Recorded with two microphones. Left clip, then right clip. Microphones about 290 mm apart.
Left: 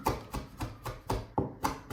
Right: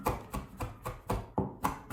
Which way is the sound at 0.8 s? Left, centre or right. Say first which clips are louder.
Left 1 dB; centre.